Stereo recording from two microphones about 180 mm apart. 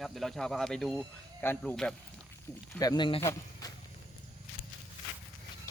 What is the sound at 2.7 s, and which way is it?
Speech, 20° left (ahead or behind).